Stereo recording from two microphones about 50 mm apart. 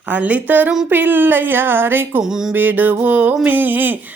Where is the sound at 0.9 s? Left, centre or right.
Right.